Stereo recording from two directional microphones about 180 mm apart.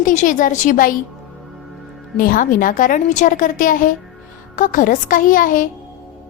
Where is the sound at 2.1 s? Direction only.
50° left (ahead or behind).